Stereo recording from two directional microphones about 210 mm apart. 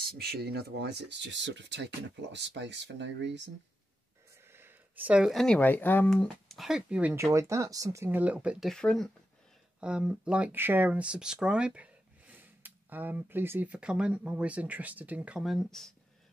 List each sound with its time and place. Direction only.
0.0 s speech: 45° right (ahead or behind)
4.5 s speech: 10° right (ahead or behind)